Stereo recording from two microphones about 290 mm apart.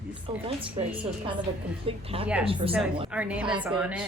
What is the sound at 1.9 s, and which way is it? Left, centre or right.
Speech, centre.